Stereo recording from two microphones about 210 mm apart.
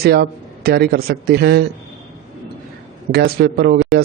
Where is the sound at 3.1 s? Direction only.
50° right (ahead or behind).